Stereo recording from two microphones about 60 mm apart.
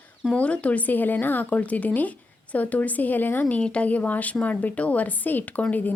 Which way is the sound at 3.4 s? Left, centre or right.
Centre.